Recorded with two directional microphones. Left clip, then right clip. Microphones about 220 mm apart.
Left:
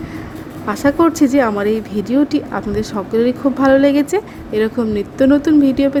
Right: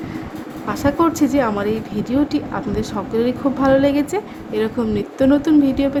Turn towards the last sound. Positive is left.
turn(degrees=15)  # may be behind; listen again after turning